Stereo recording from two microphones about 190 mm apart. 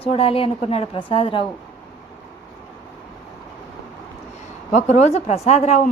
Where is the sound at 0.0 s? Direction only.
30° left (ahead or behind).